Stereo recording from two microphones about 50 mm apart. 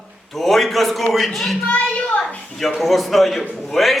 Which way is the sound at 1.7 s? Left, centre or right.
Left.